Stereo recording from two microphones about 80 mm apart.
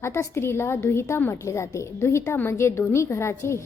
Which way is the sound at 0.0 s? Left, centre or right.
Left.